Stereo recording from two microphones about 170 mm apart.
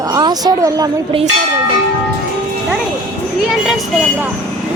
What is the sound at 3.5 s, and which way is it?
Speech, 5° right (ahead or behind).